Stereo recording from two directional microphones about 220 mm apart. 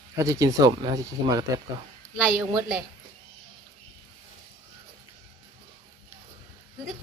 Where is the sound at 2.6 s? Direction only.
5° right (ahead or behind).